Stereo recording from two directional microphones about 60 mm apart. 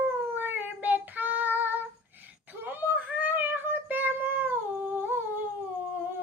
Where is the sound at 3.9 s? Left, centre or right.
Right.